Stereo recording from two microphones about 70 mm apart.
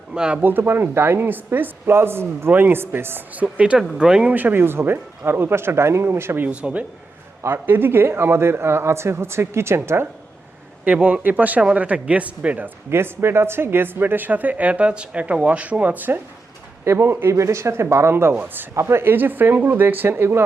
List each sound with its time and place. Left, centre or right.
0.1 s speech: centre
0.4 s speech: right; by 4.4 s centre
4.4 s speech: right
6.5 s speech: centre
7.4 s speech: right
10.8 s speech: right
12.9 s speech: right
16.8 s speech: right